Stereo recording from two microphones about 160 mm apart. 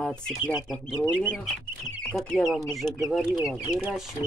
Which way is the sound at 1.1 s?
10° right (ahead or behind).